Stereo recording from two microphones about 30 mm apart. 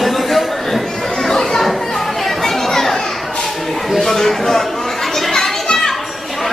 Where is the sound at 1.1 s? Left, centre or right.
Centre.